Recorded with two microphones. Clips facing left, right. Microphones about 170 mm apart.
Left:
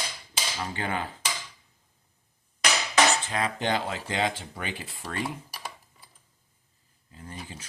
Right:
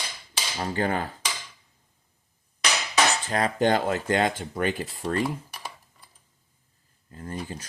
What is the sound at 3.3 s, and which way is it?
Speech, 45° right (ahead or behind).